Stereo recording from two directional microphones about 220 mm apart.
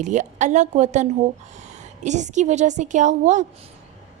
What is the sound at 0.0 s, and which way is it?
A woman's voice, 35° right (ahead or behind).